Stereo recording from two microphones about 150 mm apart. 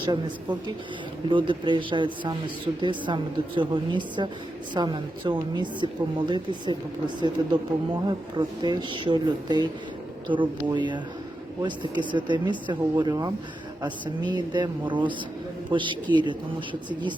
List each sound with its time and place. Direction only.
0.0 s a woman's voice: 30° right (ahead or behind)